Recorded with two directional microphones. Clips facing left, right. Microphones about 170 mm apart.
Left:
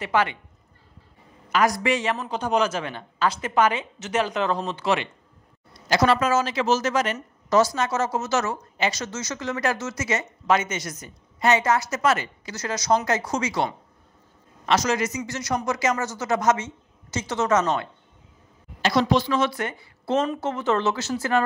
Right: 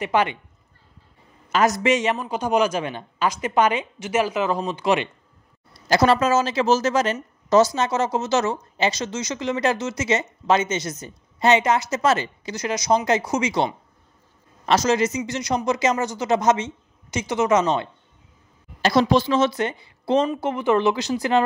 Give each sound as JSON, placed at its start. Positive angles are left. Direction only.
{"t": 0.0, "sound": "speech", "side_deg": -20}
{"t": 1.5, "sound": "a woman's voice", "side_deg": -25}
{"t": 5.7, "sound": "speech", "side_deg": -35}
{"t": 12.5, "sound": "a woman's voice", "side_deg": -15}
{"t": 18.8, "sound": "a woman's voice", "side_deg": -35}